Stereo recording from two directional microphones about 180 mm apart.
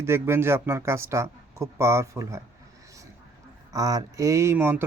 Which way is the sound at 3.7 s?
20° right (ahead or behind).